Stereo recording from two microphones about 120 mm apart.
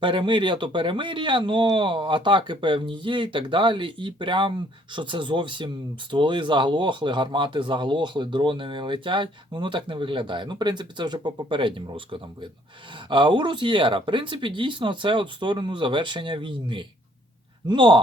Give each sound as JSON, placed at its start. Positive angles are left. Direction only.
{"t": 0.0, "sound": "speech", "side_deg": -40}